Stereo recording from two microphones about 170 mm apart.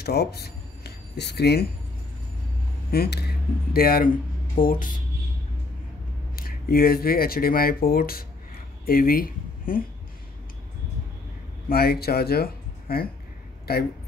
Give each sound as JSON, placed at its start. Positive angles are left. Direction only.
{"t": 0.0, "sound": "speech", "side_deg": 70}
{"t": 2.9, "sound": "speech", "side_deg": 65}
{"t": 6.3, "sound": "speech", "side_deg": 60}
{"t": 11.7, "sound": "speech", "side_deg": 65}